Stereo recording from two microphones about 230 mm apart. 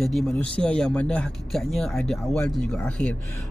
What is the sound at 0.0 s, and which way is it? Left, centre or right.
Speech, centre.